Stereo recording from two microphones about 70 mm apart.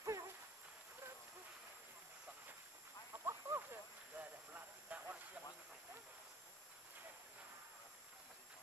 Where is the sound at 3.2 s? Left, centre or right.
Right.